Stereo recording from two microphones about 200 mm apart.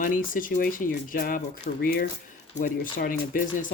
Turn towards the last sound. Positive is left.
turn(degrees=40)  # may be behind; listen again after turning